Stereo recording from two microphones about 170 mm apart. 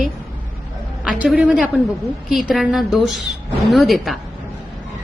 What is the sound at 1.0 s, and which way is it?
A woman's voice, 5° right (ahead or behind).